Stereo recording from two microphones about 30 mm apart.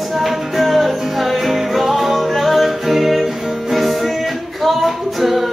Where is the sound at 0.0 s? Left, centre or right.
Centre.